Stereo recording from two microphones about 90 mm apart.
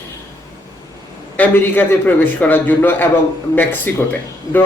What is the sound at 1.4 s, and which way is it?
Speech, 20° left (ahead or behind).